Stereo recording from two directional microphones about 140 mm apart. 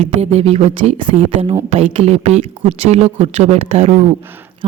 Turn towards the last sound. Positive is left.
turn(degrees=-50)  # may be behind; listen again after turning